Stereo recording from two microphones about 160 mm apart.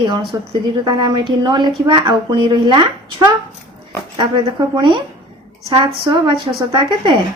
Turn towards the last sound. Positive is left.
turn(degrees=-30)  # may be behind; listen again after turning